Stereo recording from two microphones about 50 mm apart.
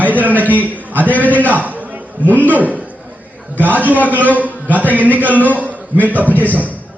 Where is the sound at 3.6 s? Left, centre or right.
Right.